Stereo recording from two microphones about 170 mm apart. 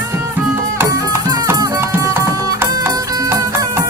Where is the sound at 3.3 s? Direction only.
15° right (ahead or behind).